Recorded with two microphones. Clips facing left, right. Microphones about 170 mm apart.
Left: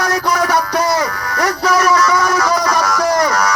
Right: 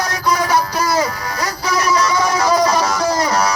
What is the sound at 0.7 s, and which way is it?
Music, 25° right (ahead or behind).